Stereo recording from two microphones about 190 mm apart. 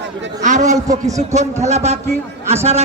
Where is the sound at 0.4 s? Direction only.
40° right (ahead or behind).